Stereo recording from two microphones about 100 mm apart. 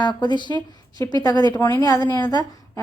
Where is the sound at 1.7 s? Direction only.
35° left (ahead or behind).